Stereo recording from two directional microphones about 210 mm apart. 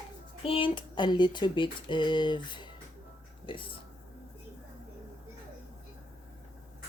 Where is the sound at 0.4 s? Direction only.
25° left (ahead or behind).